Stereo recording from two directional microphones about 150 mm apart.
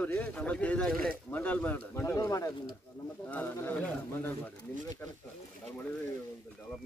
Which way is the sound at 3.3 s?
10° left (ahead or behind).